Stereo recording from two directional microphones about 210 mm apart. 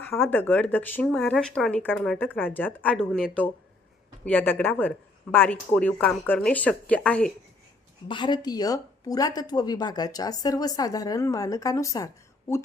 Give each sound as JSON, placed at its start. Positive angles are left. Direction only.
{"t": 0.0, "sound": "speech", "side_deg": 10}
{"t": 8.0, "sound": "speech", "side_deg": 20}